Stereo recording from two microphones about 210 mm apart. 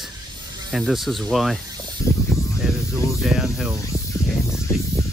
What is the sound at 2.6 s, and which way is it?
Snake, 5° right (ahead or behind).